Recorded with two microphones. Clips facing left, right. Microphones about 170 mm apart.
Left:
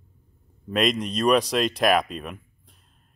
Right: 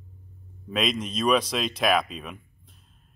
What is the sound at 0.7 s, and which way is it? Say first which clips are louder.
Speech: left 4 dB; centre (ahead or behind).